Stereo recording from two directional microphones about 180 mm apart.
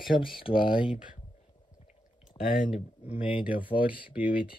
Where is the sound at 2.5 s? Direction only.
50° left (ahead or behind).